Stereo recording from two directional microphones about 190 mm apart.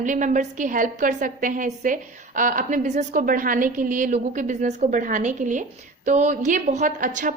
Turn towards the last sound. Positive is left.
turn(degrees=-45)  # may be behind; listen again after turning